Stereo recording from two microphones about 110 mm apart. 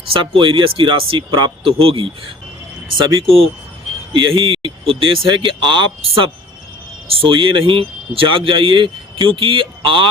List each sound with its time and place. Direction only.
0.1 s speech: 55° right (ahead or behind)
4.1 s speech: 50° right (ahead or behind)